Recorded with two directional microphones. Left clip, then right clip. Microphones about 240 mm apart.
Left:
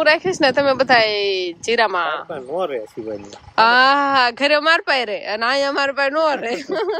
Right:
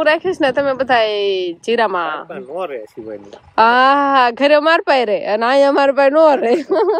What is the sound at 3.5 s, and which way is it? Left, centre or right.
A woman's voice, centre.